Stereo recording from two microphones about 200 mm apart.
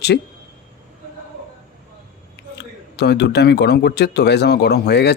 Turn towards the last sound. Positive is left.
turn(degrees=55)  # may be behind; listen again after turning